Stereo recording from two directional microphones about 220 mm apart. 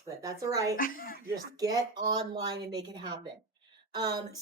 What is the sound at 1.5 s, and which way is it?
A woman's voice, 15° right (ahead or behind).